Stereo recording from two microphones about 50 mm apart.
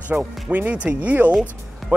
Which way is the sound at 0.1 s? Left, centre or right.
Right.